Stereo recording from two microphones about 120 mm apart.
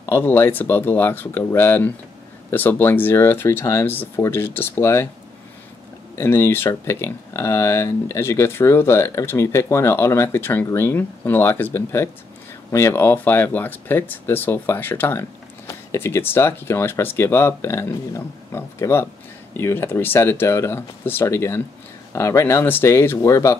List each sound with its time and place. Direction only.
0.0 s speech: 20° left (ahead or behind)
6.1 s speech: 20° left (ahead or behind)